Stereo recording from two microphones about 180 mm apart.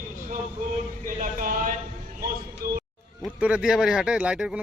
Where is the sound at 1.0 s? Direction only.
50° right (ahead or behind).